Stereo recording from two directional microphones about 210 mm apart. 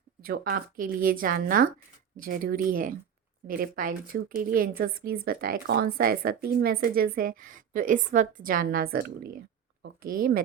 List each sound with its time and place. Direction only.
0.2 s a woman's voice: 45° right (ahead or behind)